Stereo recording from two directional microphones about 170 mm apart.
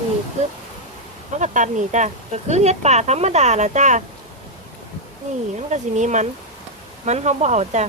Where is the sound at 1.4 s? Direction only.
45° right (ahead or behind).